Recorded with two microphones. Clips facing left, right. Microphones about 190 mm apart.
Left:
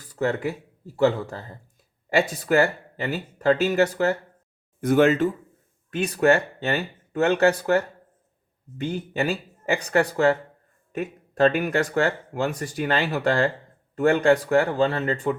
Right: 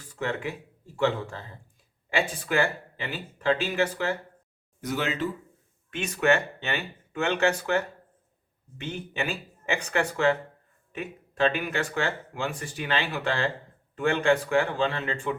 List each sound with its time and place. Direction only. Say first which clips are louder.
0.0 s speech: left 6 dB; 40° left (ahead or behind)
4.8 s speech: left 11 dB; 50° left (ahead or behind)
5.9 s speech: left 5 dB; 35° left (ahead or behind)